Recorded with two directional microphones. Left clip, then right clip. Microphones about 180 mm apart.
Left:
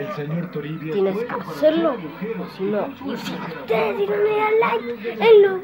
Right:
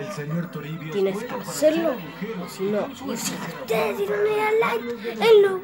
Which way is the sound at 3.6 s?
10° right (ahead or behind).